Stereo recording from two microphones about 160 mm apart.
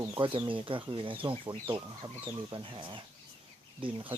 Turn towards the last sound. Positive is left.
turn(degrees=-35)  # may be behind; listen again after turning